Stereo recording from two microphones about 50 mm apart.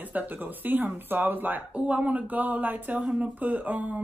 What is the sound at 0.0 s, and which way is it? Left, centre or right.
Speech, right.